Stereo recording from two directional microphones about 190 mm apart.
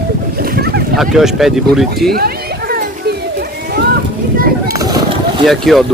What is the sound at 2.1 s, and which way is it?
Children playing, 55° right (ahead or behind).